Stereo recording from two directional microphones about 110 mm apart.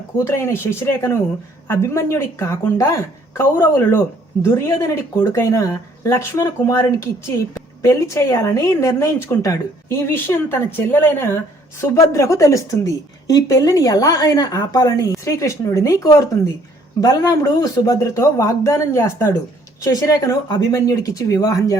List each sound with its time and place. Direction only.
0.3 s speech: 25° left (ahead or behind)